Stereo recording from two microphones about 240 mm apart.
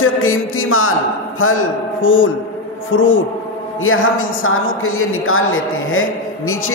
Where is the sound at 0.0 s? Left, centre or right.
Left.